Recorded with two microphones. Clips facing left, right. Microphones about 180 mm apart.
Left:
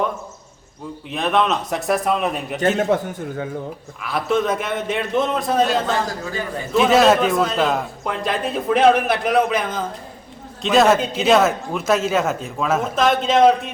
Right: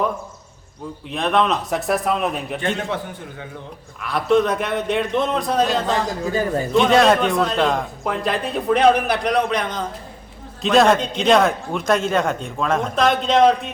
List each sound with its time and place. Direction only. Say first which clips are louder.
1.1 s a man's voice: even; centre (ahead or behind)
2.7 s a man's voice: left 7 dB; 45° left (ahead or behind)
4.0 s a man's voice: right 3 dB; centre (ahead or behind)